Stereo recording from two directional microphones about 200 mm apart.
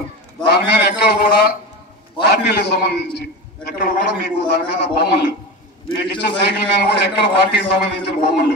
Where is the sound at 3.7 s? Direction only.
45° left (ahead or behind).